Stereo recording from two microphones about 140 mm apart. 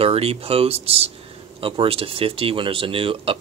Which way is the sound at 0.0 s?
45° right (ahead or behind).